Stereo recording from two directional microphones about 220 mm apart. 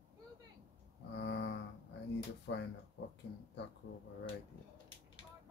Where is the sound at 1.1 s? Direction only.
55° left (ahead or behind).